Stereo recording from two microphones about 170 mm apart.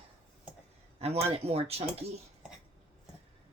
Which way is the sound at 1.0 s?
35° right (ahead or behind).